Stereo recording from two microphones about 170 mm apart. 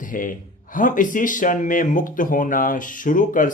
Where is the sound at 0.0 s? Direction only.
50° left (ahead or behind).